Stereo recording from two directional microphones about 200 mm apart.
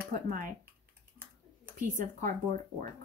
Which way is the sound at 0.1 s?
45° right (ahead or behind).